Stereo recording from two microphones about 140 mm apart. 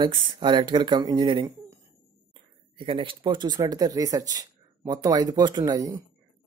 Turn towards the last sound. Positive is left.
turn(degrees=-25)  # may be behind; listen again after turning